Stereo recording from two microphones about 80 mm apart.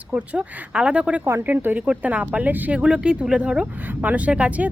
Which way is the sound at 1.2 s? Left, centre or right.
Right.